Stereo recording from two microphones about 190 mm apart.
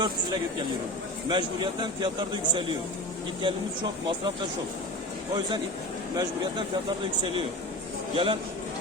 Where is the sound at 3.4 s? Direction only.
25° right (ahead or behind).